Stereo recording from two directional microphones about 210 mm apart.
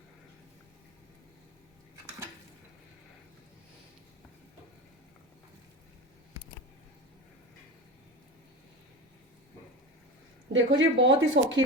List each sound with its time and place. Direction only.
10.5 s speech: 60° right (ahead or behind)